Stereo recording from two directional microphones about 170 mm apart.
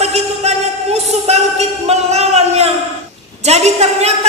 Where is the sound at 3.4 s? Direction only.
40° right (ahead or behind).